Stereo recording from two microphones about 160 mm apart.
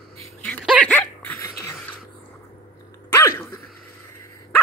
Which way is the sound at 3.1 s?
15° left (ahead or behind).